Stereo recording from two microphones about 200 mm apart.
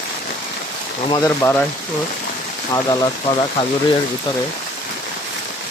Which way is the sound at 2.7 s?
15° left (ahead or behind).